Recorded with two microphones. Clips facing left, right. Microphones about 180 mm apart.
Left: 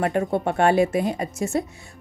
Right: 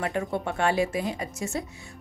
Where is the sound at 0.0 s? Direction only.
50° left (ahead or behind).